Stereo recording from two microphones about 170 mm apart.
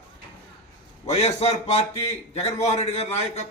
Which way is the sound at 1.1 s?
40° left (ahead or behind).